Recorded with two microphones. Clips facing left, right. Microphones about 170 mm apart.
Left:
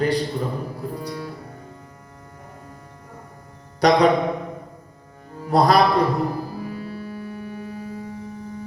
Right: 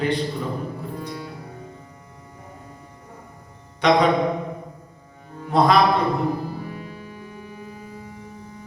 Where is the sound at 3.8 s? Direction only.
40° left (ahead or behind).